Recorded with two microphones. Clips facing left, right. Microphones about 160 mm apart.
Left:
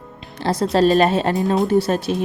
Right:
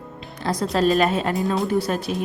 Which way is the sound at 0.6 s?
30° left (ahead or behind).